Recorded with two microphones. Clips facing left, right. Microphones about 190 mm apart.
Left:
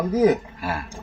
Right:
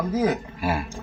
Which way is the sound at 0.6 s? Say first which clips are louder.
Right 3 dB; 5° right (ahead or behind).